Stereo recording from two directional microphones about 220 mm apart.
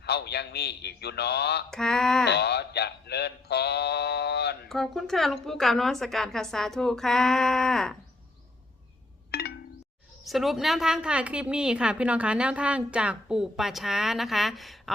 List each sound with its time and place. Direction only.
0.0 s male singing: 50° left (ahead or behind)
1.7 s a woman's voice: centre (ahead or behind)
2.2 s male singing: 50° left (ahead or behind)
4.7 s a woman's voice: centre (ahead or behind)
9.3 s a sound: 45° left (ahead or behind)
10.2 s a woman's voice: centre (ahead or behind)